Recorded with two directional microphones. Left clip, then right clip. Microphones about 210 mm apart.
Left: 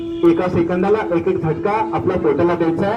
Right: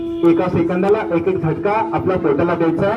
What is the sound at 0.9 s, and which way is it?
Speech, 45° left (ahead or behind).